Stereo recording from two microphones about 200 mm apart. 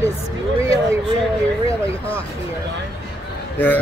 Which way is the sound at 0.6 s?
15° right (ahead or behind).